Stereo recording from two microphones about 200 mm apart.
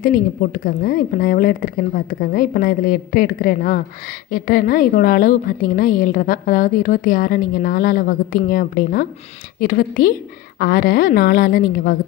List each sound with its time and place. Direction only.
0.0 s a woman's voice: 45° left (ahead or behind)